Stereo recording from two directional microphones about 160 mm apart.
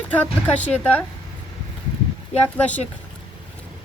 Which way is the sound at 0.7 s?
10° left (ahead or behind).